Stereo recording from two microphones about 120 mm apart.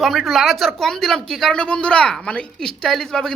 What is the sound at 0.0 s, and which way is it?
Speech, centre (ahead or behind).